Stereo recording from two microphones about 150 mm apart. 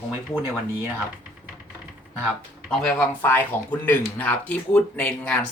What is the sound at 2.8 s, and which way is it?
Speech, 10° left (ahead or behind).